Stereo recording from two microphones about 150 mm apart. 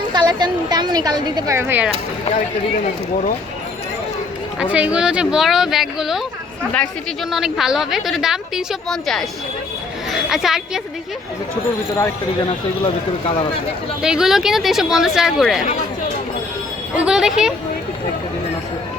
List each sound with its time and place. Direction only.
0.1 s speech: 30° right (ahead or behind); by 1.9 s 15° right (ahead or behind)
4.6 s a woman's voice: 10° right (ahead or behind)
7.3 s a woman's voice: centre (ahead or behind)
10.1 s a sound: centre (ahead or behind)
12.5 s speech: 40° left (ahead or behind)
14.0 s a woman's voice: 5° right (ahead or behind)
17.0 s a woman's voice: 5° right (ahead or behind)